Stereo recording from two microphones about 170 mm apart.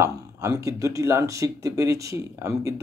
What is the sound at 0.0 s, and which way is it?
Speech, 20° right (ahead or behind).